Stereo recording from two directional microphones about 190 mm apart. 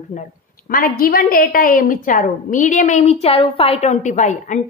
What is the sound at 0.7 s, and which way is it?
A woman's voice, 50° left (ahead or behind).